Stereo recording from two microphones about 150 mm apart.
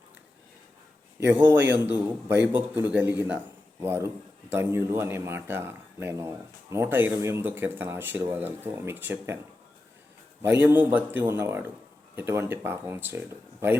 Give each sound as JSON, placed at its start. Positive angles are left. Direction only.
{"t": 1.2, "sound": "speech", "side_deg": -15}
{"t": 10.4, "sound": "speech", "side_deg": -15}